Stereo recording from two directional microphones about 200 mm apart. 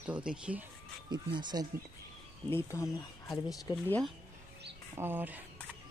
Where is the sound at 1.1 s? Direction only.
20° right (ahead or behind).